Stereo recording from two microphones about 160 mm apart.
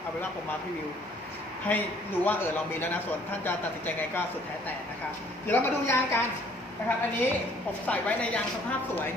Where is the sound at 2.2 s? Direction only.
10° left (ahead or behind).